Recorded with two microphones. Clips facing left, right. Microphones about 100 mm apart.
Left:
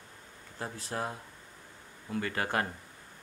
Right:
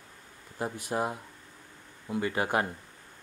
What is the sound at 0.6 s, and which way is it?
Speech, 15° right (ahead or behind).